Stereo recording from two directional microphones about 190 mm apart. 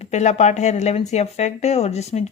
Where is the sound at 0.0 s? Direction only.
35° left (ahead or behind).